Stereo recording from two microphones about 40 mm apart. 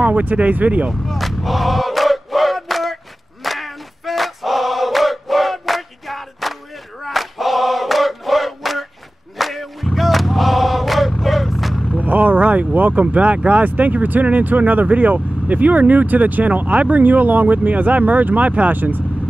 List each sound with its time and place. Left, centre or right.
0.0 s speech: right
1.0 s battle cry: centre
3.4 s choir: centre
9.4 s a sound: centre
12.0 s vehicle: right
13.0 s speech: right
17.0 s speech: right
18.8 s speech: right